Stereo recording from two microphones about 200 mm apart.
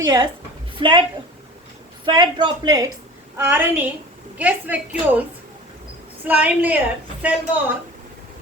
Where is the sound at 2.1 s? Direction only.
20° right (ahead or behind).